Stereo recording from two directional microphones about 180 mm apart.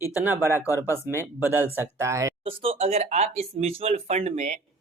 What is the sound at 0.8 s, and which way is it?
Speech, 15° right (ahead or behind).